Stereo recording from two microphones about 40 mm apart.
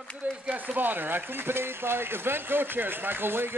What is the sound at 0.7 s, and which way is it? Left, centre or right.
Speech, right.